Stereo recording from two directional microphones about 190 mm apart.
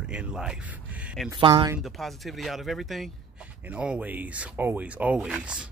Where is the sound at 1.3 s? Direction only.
25° right (ahead or behind).